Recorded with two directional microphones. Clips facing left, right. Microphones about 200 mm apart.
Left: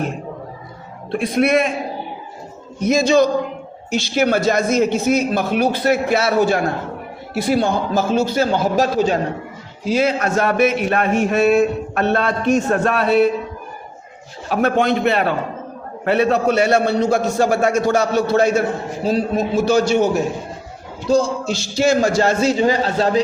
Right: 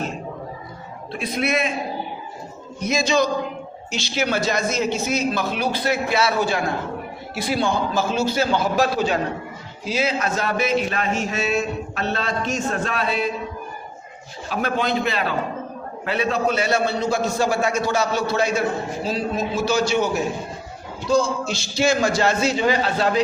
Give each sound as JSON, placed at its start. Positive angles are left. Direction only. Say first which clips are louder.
{"t": 1.1, "sound": "speech", "louder": "left 7 dB", "side_deg": 50}
{"t": 2.8, "sound": "a man's voice", "louder": "left 6 dB", "side_deg": 50}
{"t": 14.8, "sound": "a man's voice", "louder": "left 5 dB", "side_deg": 60}